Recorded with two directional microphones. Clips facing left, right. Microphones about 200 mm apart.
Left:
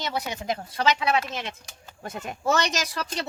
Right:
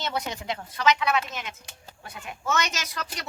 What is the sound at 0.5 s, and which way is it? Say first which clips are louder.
Speech: right 1 dB; 30° left (ahead or behind).